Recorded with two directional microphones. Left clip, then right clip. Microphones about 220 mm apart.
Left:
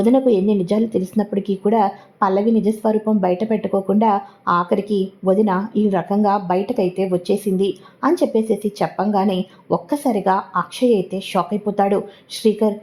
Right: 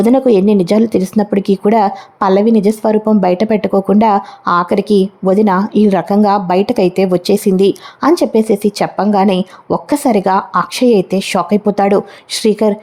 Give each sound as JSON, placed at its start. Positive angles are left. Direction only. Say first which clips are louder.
{"t": 0.0, "sound": "speech", "louder": "right 6 dB", "side_deg": -30}